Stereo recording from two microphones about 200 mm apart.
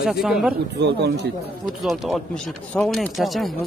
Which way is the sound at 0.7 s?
55° right (ahead or behind).